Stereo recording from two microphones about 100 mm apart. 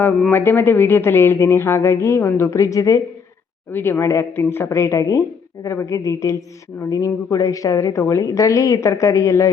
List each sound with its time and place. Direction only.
0.3 s speech: 20° left (ahead or behind)
3.7 s a woman's voice: 20° left (ahead or behind)